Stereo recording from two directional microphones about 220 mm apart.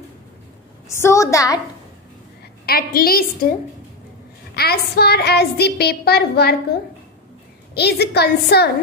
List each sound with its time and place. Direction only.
0.8 s a woman's voice: 10° left (ahead or behind)
2.6 s a woman's voice: 45° left (ahead or behind)
4.6 s a woman's voice: 45° left (ahead or behind)
7.7 s a woman's voice: 50° left (ahead or behind)